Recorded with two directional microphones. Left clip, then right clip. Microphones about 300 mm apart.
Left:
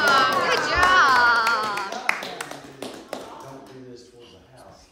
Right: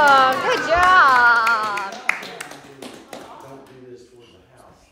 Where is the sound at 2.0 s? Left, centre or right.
Left.